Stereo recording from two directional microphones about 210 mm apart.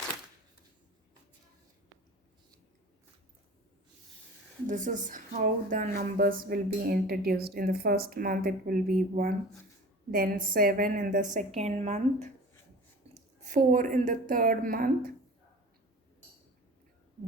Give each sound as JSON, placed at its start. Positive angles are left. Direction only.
{"t": 4.6, "sound": "speech", "side_deg": -35}
{"t": 10.1, "sound": "a woman's voice", "side_deg": -45}